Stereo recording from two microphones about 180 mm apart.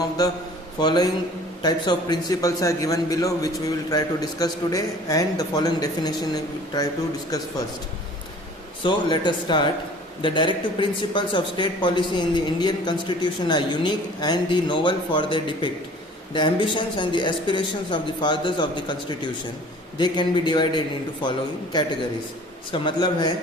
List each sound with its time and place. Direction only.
0.8 s speech: 20° left (ahead or behind)
8.8 s speech: 25° left (ahead or behind)